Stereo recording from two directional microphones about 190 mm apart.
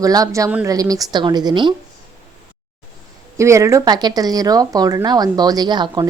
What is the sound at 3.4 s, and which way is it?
Speech, 15° right (ahead or behind).